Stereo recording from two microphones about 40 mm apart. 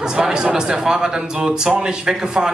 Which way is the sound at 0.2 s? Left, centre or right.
Centre.